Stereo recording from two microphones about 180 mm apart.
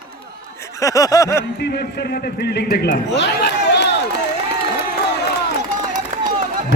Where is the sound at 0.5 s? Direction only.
15° left (ahead or behind).